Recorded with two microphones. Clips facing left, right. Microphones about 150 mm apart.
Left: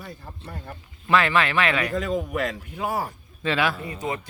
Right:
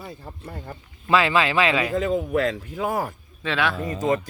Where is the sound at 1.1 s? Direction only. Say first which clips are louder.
Right 1 dB; 10° right (ahead or behind).